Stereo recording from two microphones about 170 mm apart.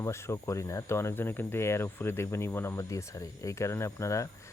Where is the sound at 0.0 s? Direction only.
15° left (ahead or behind).